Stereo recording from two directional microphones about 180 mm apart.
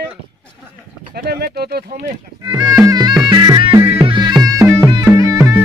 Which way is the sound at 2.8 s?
20° right (ahead or behind).